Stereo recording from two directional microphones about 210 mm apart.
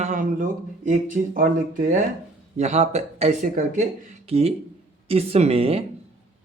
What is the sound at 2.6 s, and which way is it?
A man's voice, 30° right (ahead or behind).